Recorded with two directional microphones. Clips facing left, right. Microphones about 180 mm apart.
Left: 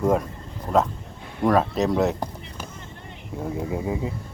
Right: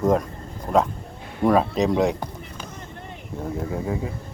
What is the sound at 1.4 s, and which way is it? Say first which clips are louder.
Speech: right 1 dB; centre (ahead or behind).